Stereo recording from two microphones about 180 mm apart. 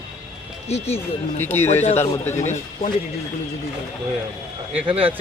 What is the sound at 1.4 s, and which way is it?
Speech, 10° left (ahead or behind).